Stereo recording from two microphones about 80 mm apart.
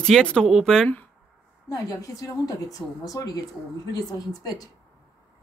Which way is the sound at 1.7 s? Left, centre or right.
Left.